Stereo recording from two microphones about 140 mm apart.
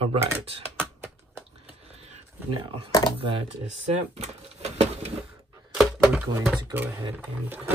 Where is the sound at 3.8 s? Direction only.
50° right (ahead or behind).